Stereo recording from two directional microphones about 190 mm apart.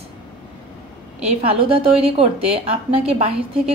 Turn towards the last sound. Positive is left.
turn(degrees=-30)  # may be behind; listen again after turning